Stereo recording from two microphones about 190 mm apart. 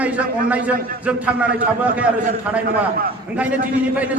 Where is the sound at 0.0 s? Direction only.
5° right (ahead or behind).